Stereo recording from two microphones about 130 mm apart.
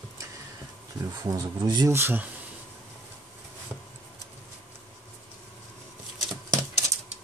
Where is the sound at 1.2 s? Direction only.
30° right (ahead or behind).